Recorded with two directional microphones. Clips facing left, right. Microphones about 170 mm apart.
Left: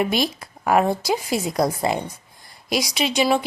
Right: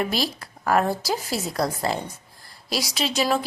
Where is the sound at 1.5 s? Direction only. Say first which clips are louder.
Left 4 dB; 15° left (ahead or behind).